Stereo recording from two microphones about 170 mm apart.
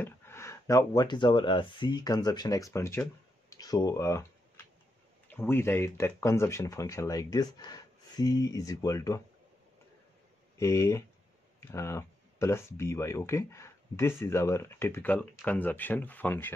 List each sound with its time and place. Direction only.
0.0 s speech: 15° left (ahead or behind)
5.3 s speech: 10° left (ahead or behind)
10.6 s speech: 15° left (ahead or behind)